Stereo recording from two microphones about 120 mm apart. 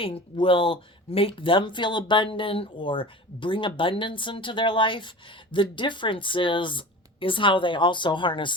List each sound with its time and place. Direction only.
0.0 s speech: 50° left (ahead or behind)